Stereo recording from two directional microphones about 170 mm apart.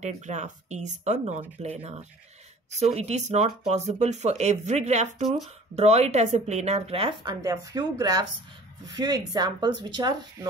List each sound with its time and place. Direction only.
0.0 s speech: 45° right (ahead or behind); by 10.5 s 25° right (ahead or behind)